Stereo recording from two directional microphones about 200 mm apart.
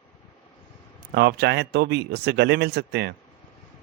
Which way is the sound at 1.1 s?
55° right (ahead or behind).